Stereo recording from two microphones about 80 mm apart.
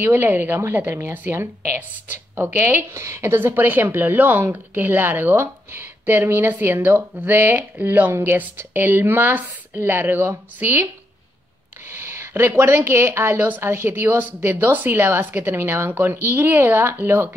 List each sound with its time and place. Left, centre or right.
0.0 s a woman's voice: right
11.9 s a woman's voice: right